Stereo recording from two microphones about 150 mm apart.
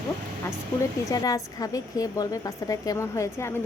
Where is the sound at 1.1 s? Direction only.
25° left (ahead or behind).